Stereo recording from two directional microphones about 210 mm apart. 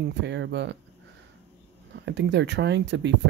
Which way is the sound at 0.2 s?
55° right (ahead or behind).